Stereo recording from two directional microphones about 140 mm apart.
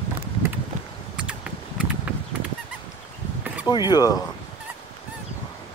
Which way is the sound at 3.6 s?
30° left (ahead or behind).